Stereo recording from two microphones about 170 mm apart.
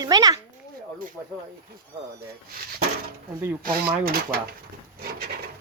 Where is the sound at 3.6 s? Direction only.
55° right (ahead or behind).